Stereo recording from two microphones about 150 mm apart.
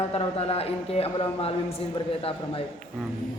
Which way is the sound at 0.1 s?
40° left (ahead or behind).